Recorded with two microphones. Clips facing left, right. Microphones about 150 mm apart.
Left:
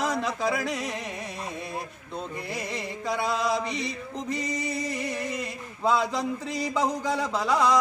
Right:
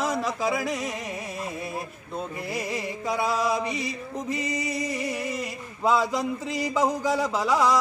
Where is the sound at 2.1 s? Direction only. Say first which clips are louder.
Right 2 dB; 5° right (ahead or behind).